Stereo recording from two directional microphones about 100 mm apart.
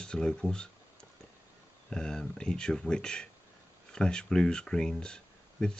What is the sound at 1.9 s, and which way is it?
Speech, 5° left (ahead or behind).